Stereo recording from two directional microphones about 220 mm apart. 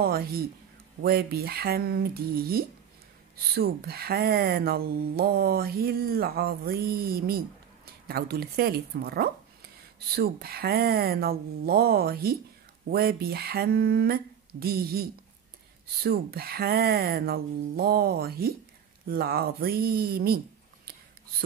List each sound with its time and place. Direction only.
0.0 s speech: 45° right (ahead or behind)